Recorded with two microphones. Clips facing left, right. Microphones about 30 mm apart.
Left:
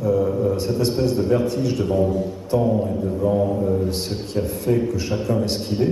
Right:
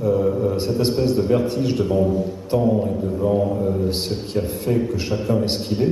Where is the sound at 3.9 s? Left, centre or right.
Right.